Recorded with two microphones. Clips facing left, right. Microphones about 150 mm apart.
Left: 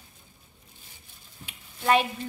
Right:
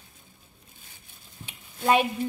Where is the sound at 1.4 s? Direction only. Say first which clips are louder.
Right 1 dB; 20° right (ahead or behind).